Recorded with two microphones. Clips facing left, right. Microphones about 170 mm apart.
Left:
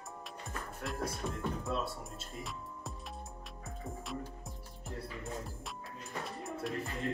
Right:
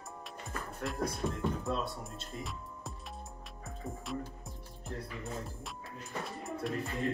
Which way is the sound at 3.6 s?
Centre (ahead or behind).